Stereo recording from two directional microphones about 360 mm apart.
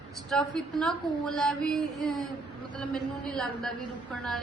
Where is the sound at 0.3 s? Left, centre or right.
Centre.